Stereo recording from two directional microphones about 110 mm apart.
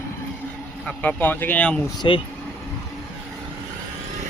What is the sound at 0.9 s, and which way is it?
Speech, 15° left (ahead or behind).